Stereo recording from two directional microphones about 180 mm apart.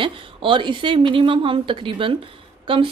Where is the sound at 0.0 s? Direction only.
30° right (ahead or behind).